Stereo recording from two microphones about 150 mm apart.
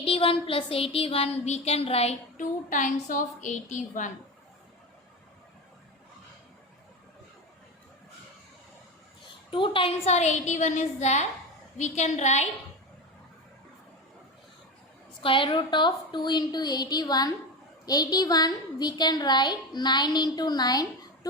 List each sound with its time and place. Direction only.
0.0 s a sound: 40° left (ahead or behind)
2.4 s a woman's voice: 60° left (ahead or behind)
9.5 s a woman's voice: 35° left (ahead or behind)
15.2 s a woman's voice: 35° left (ahead or behind)